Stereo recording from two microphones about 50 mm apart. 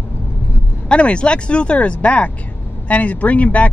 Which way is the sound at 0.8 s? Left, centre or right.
Left.